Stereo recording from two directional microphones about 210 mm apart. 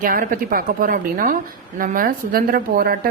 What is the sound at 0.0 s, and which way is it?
A woman's voice, 40° right (ahead or behind).